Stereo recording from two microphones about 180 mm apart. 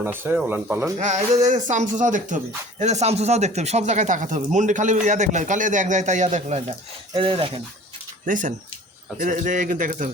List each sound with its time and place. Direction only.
0.0 s speech: 10° right (ahead or behind)
0.9 s speech: 40° right (ahead or behind)
7.1 s speech: 30° right (ahead or behind)
8.3 s speech: 45° right (ahead or behind)